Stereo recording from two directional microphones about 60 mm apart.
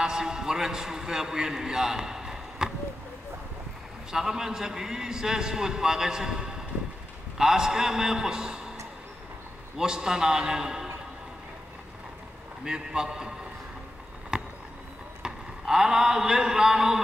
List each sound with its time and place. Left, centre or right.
0.0 s a man's voice: centre
4.1 s a man's voice: centre
9.8 s a man's voice: centre
12.6 s a man's voice: centre
14.3 s a sound: centre
15.2 s a man's voice: centre